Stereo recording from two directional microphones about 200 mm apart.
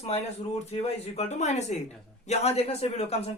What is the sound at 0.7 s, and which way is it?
A man's voice, 30° left (ahead or behind).